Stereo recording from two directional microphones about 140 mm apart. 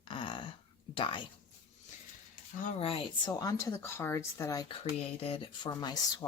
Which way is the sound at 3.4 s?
25° left (ahead or behind).